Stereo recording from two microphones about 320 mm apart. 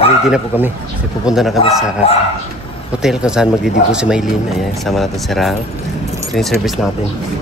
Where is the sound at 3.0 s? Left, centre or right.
Centre.